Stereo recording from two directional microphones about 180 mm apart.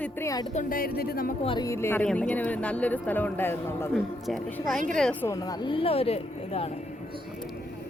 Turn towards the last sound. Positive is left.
turn(degrees=35)  # may be behind; listen again after turning